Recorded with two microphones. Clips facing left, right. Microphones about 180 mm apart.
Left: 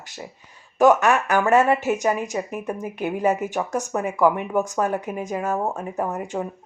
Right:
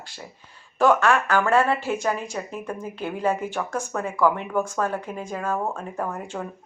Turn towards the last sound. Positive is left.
turn(degrees=15)  # may be behind; listen again after turning